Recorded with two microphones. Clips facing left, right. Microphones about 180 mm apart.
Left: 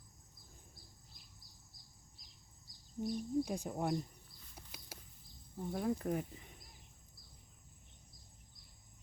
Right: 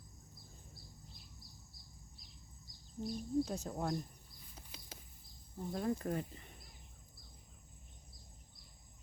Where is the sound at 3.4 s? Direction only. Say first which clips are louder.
Left 1 dB; 10° left (ahead or behind).